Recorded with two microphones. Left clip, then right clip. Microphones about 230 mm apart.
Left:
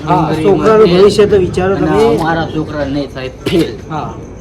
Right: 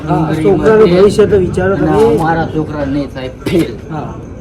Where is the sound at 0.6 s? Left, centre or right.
Left.